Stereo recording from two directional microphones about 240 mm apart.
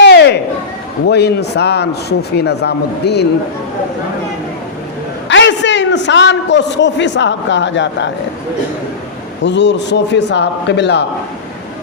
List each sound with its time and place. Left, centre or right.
0.0 s a sound: left
1.0 s a man's voice: left
5.3 s a man's voice: left
9.4 s a man's voice: left